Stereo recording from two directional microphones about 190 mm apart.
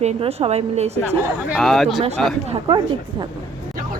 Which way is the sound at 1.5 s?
Centre (ahead or behind).